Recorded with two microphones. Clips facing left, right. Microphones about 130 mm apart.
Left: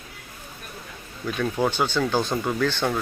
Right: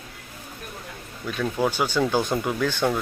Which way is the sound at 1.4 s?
5° right (ahead or behind).